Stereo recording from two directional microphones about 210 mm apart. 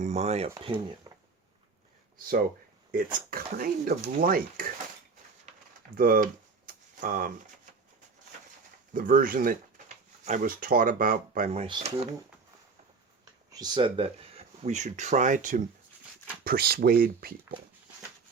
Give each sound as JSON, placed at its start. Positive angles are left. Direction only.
{"t": 0.0, "sound": "speech", "side_deg": -30}
{"t": 0.5, "sound": "speech", "side_deg": -20}
{"t": 3.2, "sound": "speech", "side_deg": -45}
{"t": 6.0, "sound": "a sound", "side_deg": -40}
{"t": 8.9, "sound": "speech", "side_deg": -40}
{"t": 13.5, "sound": "speech", "side_deg": -20}